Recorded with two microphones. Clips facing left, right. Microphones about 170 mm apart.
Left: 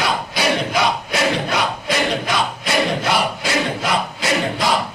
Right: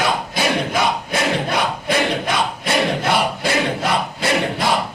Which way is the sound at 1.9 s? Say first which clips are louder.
Right 1 dB; 55° right (ahead or behind).